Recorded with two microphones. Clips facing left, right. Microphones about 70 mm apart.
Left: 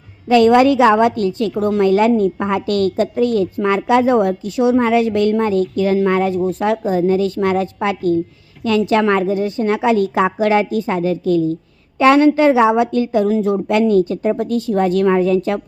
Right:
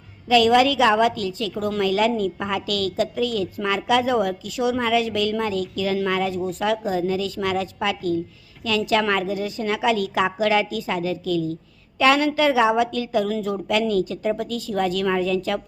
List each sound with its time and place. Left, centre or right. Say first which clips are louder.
0.3 s a woman's voice: left 6 dB; left